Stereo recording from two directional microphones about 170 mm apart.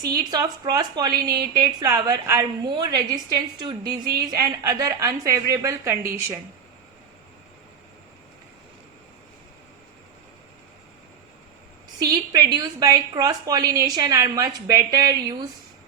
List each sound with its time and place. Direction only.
0.0 s a woman's voice: 20° right (ahead or behind)
4.0 s speech: 60° right (ahead or behind)
4.4 s a woman's voice: 20° right (ahead or behind)
11.9 s a woman's voice: 25° right (ahead or behind)